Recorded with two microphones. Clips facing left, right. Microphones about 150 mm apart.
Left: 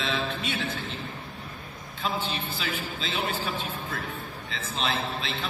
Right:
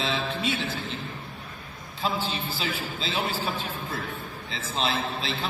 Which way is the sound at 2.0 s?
30° right (ahead or behind).